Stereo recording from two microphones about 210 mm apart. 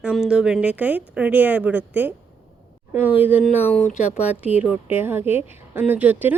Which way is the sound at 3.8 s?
30° left (ahead or behind).